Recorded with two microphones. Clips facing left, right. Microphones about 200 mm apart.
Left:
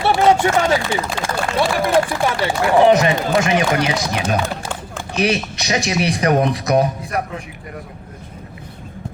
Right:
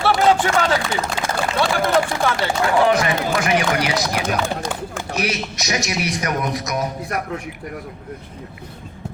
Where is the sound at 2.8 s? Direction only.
25° left (ahead or behind).